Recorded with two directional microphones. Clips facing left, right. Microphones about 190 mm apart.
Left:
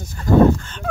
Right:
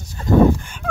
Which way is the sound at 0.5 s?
15° right (ahead or behind).